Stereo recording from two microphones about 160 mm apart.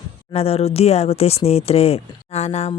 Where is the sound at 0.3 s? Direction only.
40° left (ahead or behind).